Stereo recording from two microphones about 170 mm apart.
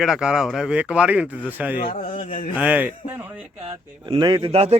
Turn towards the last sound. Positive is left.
turn(degrees=-35)  # may be behind; listen again after turning